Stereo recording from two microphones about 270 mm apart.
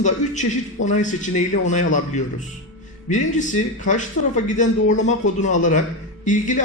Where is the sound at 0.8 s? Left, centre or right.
Left.